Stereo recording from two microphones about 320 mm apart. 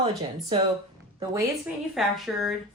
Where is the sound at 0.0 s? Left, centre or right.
Centre.